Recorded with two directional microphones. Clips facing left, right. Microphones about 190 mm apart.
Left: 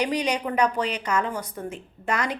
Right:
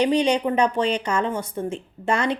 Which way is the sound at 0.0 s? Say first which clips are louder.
Right 6 dB; 25° right (ahead or behind).